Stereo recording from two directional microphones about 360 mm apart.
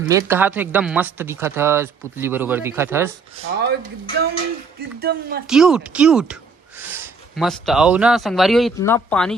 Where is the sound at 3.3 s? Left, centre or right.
Centre.